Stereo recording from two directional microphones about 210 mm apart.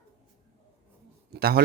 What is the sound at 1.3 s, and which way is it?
Speech, 50° right (ahead or behind).